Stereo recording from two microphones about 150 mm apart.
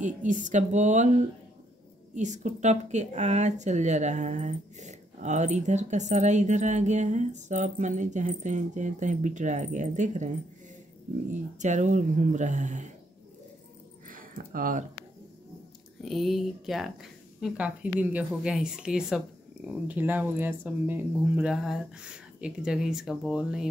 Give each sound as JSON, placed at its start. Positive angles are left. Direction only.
{"t": 0.0, "sound": "a woman's voice", "side_deg": -55}
{"t": 11.5, "sound": "speech", "side_deg": -55}
{"t": 14.0, "sound": "a sound", "side_deg": -65}
{"t": 16.0, "sound": "speech", "side_deg": 0}